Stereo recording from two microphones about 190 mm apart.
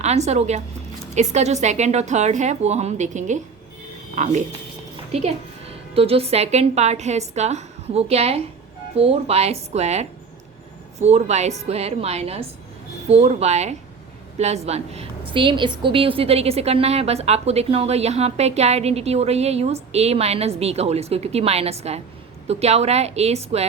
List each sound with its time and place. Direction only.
0.0 s a woman's voice: 35° right (ahead or behind)